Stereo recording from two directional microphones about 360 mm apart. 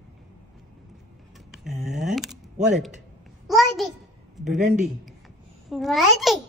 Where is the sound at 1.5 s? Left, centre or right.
Centre.